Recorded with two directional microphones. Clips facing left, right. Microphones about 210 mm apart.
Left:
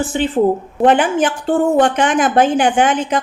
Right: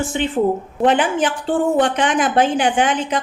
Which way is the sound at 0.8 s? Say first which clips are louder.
Left 3 dB; 50° left (ahead or behind).